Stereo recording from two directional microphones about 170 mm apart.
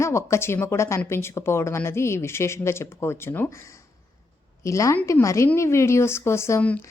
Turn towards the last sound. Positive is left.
turn(degrees=10)  # may be behind; listen again after turning